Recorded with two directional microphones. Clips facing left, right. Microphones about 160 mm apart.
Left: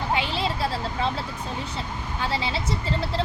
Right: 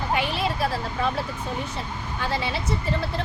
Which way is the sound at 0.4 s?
30° left (ahead or behind).